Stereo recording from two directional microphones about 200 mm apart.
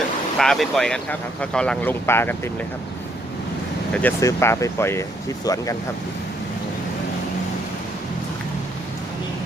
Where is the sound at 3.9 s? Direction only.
10° left (ahead or behind).